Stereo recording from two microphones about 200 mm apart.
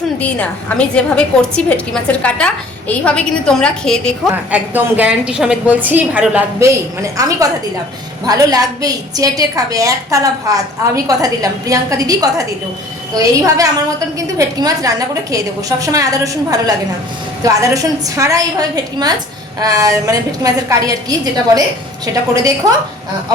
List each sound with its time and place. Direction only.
0.2 s a woman's voice: 5° left (ahead or behind)
4.5 s a woman's voice: 10° right (ahead or behind)
7.2 s a woman's voice: 15° right (ahead or behind)
19.5 s a woman's voice: 15° right (ahead or behind)